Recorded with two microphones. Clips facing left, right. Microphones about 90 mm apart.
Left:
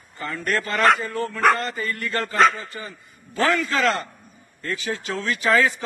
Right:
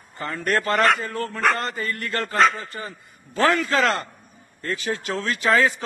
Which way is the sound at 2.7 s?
40° right (ahead or behind).